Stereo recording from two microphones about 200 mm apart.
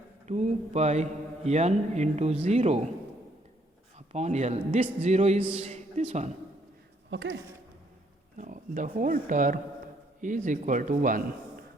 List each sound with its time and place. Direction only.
0.3 s speech: 35° right (ahead or behind)
3.9 s a man's voice: 35° right (ahead or behind)
7.1 s speech: 65° right (ahead or behind)
8.4 s speech: 40° right (ahead or behind)